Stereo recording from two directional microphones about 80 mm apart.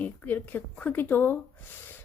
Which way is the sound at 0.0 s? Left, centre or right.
Left.